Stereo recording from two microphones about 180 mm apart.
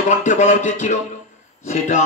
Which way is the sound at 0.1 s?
40° left (ahead or behind).